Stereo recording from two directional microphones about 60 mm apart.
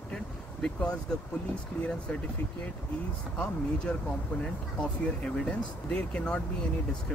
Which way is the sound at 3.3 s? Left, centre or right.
Left.